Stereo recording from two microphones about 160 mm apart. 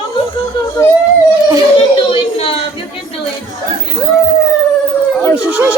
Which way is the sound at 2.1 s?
35° left (ahead or behind).